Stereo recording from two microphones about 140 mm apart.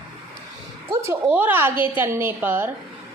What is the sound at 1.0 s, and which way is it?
A woman's voice, 15° right (ahead or behind).